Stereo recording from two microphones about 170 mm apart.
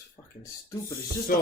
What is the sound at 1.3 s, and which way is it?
Speech, 60° left (ahead or behind).